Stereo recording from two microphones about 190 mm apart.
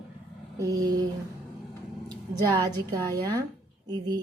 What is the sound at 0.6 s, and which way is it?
Speech, 20° right (ahead or behind).